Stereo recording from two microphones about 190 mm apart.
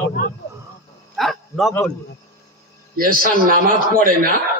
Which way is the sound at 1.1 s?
Centre (ahead or behind).